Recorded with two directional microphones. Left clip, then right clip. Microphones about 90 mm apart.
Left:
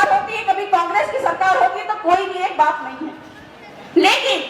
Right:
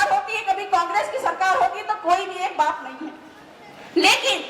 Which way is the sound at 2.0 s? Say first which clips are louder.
Left 5 dB; 25° right (ahead or behind).